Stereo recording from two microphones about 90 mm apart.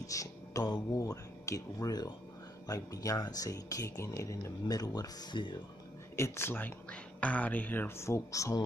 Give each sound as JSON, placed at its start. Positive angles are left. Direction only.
{"t": 0.0, "sound": "mantra", "side_deg": 40}
{"t": 0.9, "sound": "speech", "side_deg": 35}
{"t": 6.1, "sound": "speech", "side_deg": 30}
{"t": 8.1, "sound": "speech", "side_deg": 35}